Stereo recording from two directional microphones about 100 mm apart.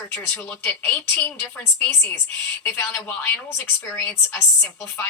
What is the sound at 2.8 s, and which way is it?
A woman's voice, 20° left (ahead or behind).